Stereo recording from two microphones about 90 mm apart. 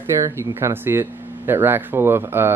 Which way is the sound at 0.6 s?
25° right (ahead or behind).